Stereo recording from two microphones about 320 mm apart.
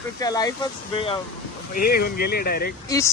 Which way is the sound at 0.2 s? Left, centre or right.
Centre.